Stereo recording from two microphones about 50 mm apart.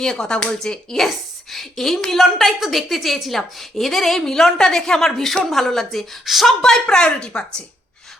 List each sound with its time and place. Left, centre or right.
0.0 s a woman's voice: centre